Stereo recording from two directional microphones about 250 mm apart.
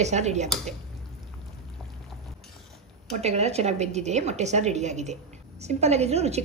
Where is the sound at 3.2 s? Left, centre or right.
Right.